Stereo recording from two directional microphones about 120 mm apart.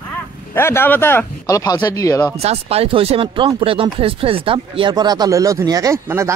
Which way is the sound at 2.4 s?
60° right (ahead or behind).